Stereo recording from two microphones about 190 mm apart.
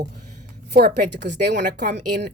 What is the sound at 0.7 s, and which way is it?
A woman's voice, 55° right (ahead or behind).